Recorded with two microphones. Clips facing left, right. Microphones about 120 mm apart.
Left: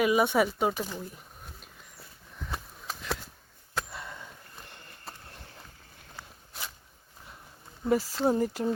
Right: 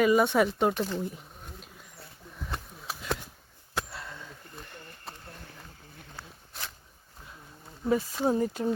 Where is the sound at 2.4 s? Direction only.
Centre (ahead or behind).